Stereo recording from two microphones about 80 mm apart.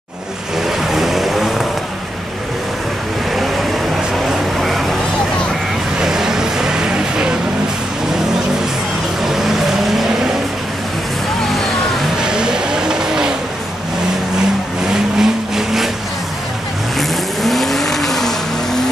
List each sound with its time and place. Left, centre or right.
0.9 s vehicle: centre
4.1 s vehicle: centre
5.9 s vehicle: centre
9.2 s vehicle: centre
12.2 s vehicle: centre
15.1 s vehicle: centre
17.4 s vehicle: centre